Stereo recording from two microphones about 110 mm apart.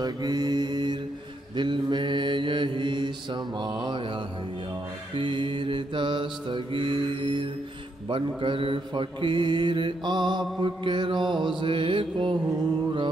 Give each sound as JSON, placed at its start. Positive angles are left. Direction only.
{"t": 0.0, "sound": "mantra", "side_deg": -35}